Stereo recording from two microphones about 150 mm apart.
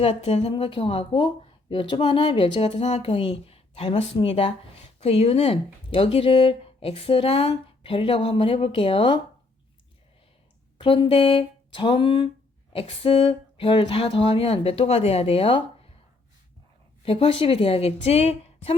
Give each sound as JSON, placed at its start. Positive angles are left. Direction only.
{"t": 0.0, "sound": "speech", "side_deg": 40}
{"t": 10.8, "sound": "speech", "side_deg": 35}
{"t": 17.0, "sound": "speech", "side_deg": 40}